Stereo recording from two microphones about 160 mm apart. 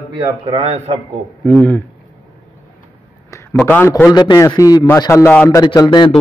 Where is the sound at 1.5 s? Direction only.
10° left (ahead or behind).